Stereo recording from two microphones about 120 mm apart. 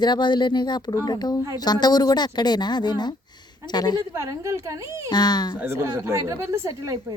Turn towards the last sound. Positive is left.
turn(degrees=-25)  # may be behind; listen again after turning